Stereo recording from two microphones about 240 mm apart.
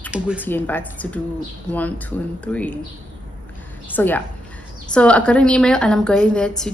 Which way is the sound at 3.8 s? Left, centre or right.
Centre.